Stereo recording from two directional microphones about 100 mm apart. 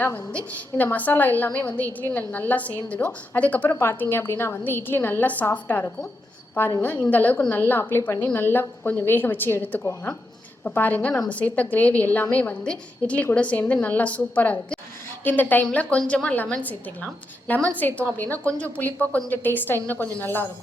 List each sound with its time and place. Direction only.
0.9 s a woman's voice: 15° left (ahead or behind)